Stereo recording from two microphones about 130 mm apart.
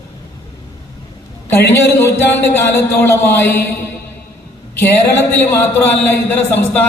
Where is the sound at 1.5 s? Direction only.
20° left (ahead or behind).